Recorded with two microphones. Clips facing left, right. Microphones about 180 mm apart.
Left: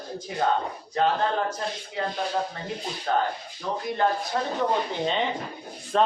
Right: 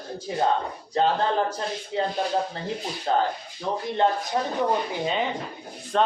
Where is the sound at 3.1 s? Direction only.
25° right (ahead or behind).